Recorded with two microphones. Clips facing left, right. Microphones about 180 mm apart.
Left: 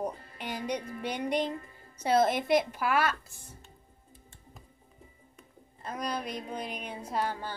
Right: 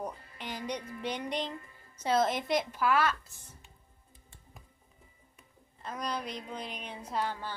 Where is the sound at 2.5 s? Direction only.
50° left (ahead or behind).